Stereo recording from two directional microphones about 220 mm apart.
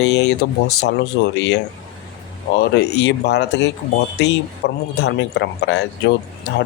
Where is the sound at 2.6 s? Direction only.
50° left (ahead or behind).